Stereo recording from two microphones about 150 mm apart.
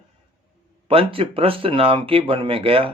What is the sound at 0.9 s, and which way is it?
Speech, 40° right (ahead or behind).